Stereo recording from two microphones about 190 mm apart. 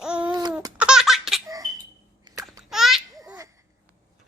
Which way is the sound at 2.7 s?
Centre (ahead or behind).